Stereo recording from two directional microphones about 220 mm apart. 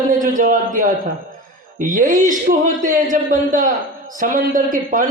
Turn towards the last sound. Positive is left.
turn(degrees=-40)  # may be behind; listen again after turning